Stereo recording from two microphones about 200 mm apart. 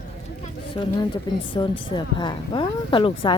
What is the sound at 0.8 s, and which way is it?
Speech, 25° left (ahead or behind).